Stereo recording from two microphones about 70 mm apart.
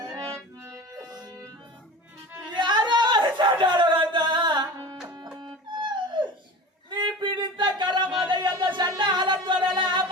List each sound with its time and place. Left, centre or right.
2.6 s a sound: right
5.0 s music: right
5.4 s dog: right
6.9 s a sound: right
8.3 s music: right
9.0 s music: right